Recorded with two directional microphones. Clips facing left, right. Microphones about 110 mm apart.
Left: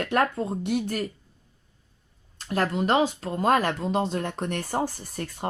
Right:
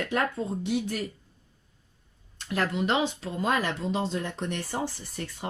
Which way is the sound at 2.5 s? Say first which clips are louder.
Left 3 dB; 40° left (ahead or behind).